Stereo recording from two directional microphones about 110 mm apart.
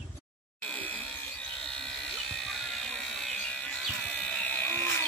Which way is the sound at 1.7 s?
5° left (ahead or behind).